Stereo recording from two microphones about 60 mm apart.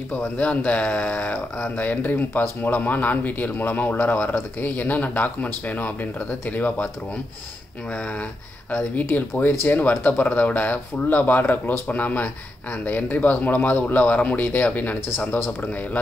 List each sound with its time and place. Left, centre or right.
0.1 s speech: left
8.7 s speech: left